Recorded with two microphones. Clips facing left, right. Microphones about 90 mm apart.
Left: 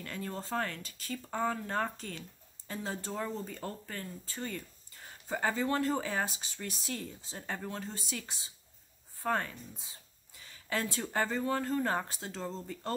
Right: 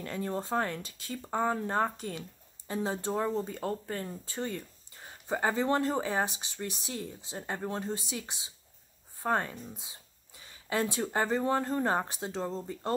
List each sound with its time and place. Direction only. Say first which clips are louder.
0.0 s speech: right 5 dB; 20° right (ahead or behind)
9.2 s a sound: right 3 dB; 20° right (ahead or behind)
11.1 s speech: right 1 dB; 20° right (ahead or behind)